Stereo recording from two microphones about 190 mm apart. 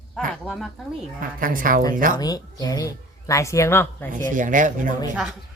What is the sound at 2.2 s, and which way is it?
Speech, 20° left (ahead or behind).